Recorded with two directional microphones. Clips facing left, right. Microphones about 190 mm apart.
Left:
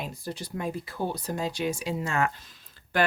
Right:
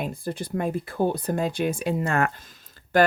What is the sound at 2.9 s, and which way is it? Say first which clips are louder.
Speech: right 6 dB; 40° right (ahead or behind).